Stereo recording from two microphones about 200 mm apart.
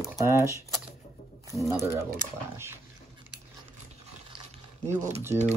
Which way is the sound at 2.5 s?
10° right (ahead or behind).